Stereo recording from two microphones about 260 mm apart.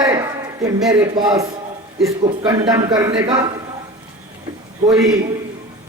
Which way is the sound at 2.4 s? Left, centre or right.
Centre.